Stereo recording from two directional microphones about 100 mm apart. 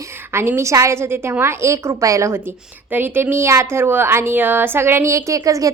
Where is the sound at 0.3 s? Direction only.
25° right (ahead or behind).